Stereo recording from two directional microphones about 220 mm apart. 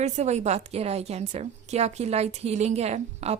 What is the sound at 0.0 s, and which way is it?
A woman's voice, 30° right (ahead or behind).